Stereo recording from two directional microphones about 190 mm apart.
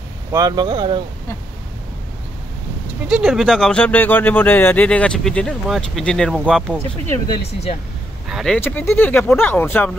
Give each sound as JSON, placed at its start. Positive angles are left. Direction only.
{"t": 0.3, "sound": "speech", "side_deg": -20}
{"t": 3.1, "sound": "speech", "side_deg": 0}
{"t": 8.3, "sound": "speech", "side_deg": 0}
{"t": 8.5, "sound": "speech", "side_deg": 10}